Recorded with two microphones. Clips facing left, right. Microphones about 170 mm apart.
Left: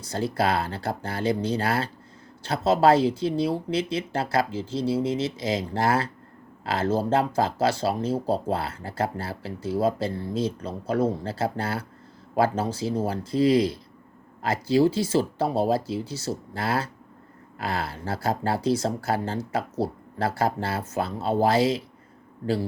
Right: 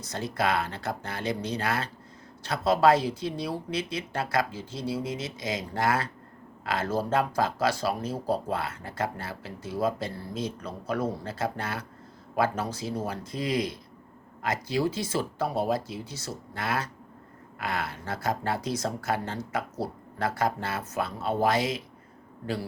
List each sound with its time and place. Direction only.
0.0 s speech: 30° left (ahead or behind)